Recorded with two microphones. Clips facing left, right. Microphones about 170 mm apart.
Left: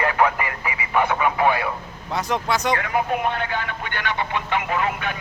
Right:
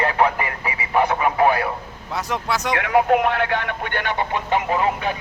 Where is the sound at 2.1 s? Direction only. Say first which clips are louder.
Left 1 dB; centre (ahead or behind).